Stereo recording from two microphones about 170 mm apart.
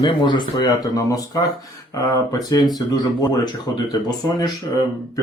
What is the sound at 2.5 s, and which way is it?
Speech, 25° left (ahead or behind).